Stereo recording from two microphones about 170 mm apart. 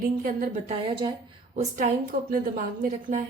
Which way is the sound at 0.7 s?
25° right (ahead or behind).